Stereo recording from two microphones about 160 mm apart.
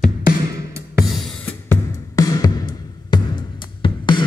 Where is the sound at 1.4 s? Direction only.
15° left (ahead or behind).